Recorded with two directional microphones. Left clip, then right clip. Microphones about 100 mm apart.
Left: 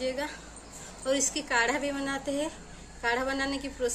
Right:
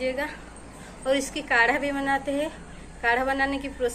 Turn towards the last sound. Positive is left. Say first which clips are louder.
# right 5 dB
turn(degrees=50)  # may be behind; listen again after turning